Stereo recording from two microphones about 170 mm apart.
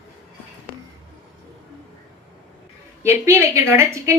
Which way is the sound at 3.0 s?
15° right (ahead or behind).